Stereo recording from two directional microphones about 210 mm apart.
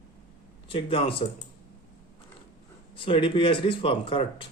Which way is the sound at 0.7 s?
25° left (ahead or behind).